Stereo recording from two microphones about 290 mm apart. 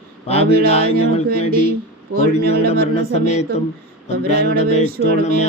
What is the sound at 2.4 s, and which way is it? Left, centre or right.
Speech, left.